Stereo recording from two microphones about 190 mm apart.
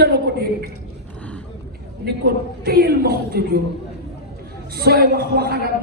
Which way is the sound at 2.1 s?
55° right (ahead or behind).